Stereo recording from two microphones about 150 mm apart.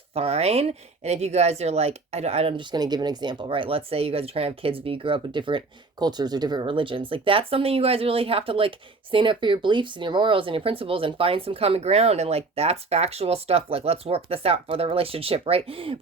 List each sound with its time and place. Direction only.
0.1 s speech: 40° right (ahead or behind)